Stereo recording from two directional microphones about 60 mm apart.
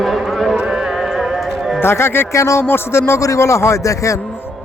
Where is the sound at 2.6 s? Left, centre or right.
Left.